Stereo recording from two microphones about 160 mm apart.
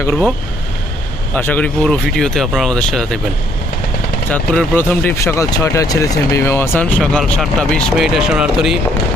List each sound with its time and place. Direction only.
1.3 s speech: 10° left (ahead or behind)
4.3 s speech: 10° left (ahead or behind)